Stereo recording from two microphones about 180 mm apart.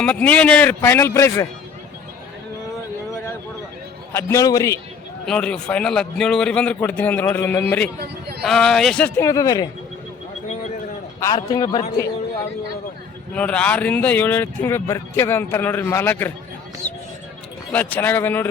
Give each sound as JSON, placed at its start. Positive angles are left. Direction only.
{"t": 0.0, "sound": "speech", "side_deg": 5}
{"t": 4.1, "sound": "speech", "side_deg": 15}
{"t": 5.2, "sound": "a man's voice", "side_deg": 5}
{"t": 11.2, "sound": "a man's voice", "side_deg": 20}
{"t": 13.3, "sound": "speech", "side_deg": 5}
{"t": 17.7, "sound": "speech", "side_deg": 10}